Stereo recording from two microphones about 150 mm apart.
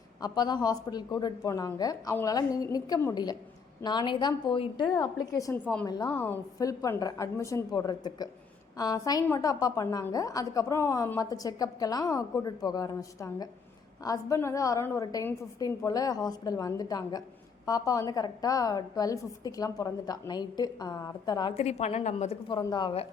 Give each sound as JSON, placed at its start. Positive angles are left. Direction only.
{"t": 0.2, "sound": "a woman's voice", "side_deg": 30}
{"t": 4.9, "sound": "a woman's voice", "side_deg": 25}
{"t": 6.1, "sound": "a woman's voice", "side_deg": 10}
{"t": 21.5, "sound": "a woman's voice", "side_deg": 45}
{"t": 22.4, "sound": "speech", "side_deg": 30}